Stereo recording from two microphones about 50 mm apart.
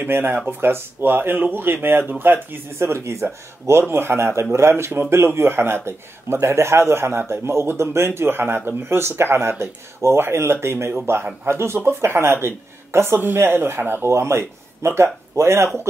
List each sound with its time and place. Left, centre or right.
0.0 s speech: right
2.8 s a man's voice: right
3.9 s a man's voice: right
13.2 s a man's voice: right